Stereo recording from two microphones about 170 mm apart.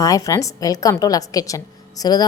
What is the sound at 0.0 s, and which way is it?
A woman's voice, 20° left (ahead or behind).